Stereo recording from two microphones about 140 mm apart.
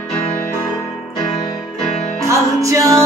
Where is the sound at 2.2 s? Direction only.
20° right (ahead or behind).